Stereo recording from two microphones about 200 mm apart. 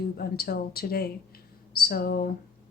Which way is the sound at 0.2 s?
50° left (ahead or behind).